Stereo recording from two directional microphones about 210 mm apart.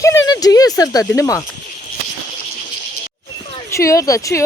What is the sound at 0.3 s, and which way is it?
Speech, 20° left (ahead or behind).